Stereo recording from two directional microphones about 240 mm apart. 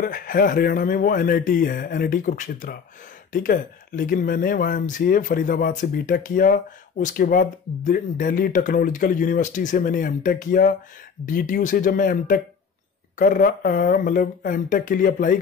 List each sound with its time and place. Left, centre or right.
0.0 s speech: left